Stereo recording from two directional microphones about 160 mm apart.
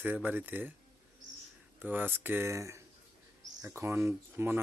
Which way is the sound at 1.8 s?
10° right (ahead or behind).